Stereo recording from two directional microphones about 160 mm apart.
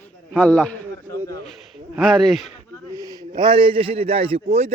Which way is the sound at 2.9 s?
20° right (ahead or behind).